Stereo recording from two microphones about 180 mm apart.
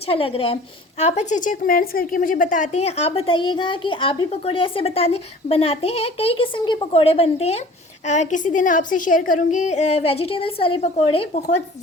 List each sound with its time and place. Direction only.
0.1 s a woman's voice: 30° left (ahead or behind)